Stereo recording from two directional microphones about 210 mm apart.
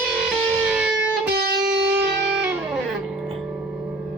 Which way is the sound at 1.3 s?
45° right (ahead or behind).